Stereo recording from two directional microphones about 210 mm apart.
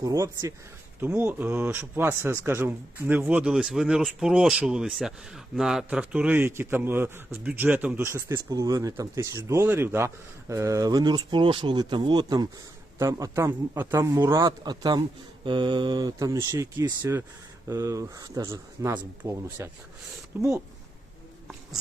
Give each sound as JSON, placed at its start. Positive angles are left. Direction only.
{"t": 0.0, "sound": "speech", "side_deg": -15}